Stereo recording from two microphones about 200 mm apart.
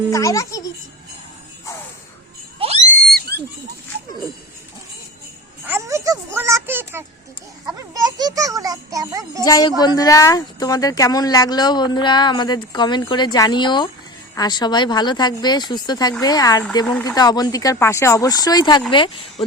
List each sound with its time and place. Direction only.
0.1 s speech: 15° left (ahead or behind)
2.6 s screaming: 30° right (ahead or behind)
3.1 s a sound: 50° right (ahead or behind)
5.6 s a sound: 10° right (ahead or behind)
7.8 s a child's voice: 15° right (ahead or behind)
9.4 s speech: 20° left (ahead or behind)